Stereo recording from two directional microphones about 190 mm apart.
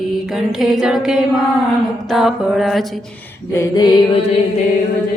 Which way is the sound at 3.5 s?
15° left (ahead or behind).